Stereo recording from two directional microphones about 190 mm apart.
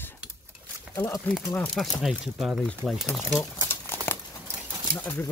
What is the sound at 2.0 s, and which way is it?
Speech, centre (ahead or behind).